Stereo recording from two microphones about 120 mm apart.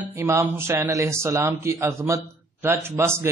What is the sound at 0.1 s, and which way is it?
Speech, 25° right (ahead or behind).